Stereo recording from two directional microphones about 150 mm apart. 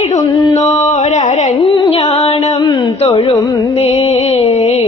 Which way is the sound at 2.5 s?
30° left (ahead or behind).